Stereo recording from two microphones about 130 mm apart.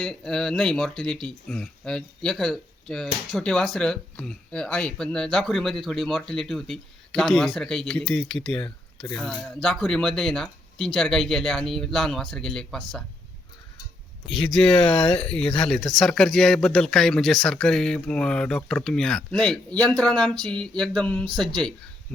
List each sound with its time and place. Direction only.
0.0 s speech: 5° left (ahead or behind)
14.3 s speech: 45° left (ahead or behind)
15.3 s speech: 5° left (ahead or behind)
20.4 s a sound: 5° left (ahead or behind)